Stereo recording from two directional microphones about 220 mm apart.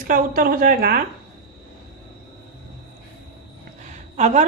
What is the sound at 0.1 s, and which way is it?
Speech, 40° right (ahead or behind).